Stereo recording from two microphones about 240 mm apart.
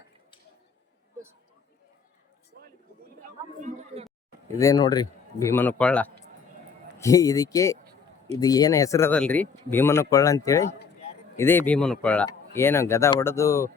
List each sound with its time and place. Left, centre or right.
3.2 s speech: right
4.5 s speech: centre